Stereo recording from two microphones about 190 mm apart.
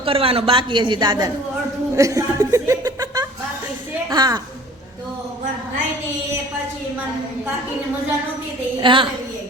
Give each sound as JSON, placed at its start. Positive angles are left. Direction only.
{"t": 0.0, "sound": "a woman's voice", "side_deg": -30}
{"t": 8.8, "sound": "a woman's voice", "side_deg": -25}